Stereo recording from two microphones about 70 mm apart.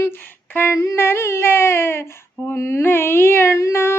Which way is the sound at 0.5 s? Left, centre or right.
Left.